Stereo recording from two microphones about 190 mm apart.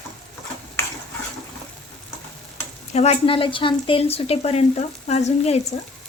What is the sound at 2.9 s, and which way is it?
Speech, 35° left (ahead or behind).